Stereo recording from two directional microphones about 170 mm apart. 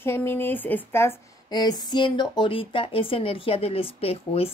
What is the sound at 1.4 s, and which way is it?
A woman's voice, 25° left (ahead or behind).